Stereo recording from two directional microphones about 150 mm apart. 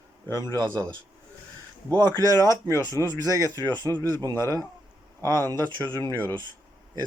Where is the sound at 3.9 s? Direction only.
20° left (ahead or behind).